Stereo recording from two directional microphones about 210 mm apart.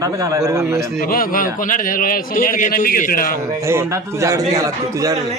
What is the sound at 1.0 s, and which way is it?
A man's voice, 40° left (ahead or behind).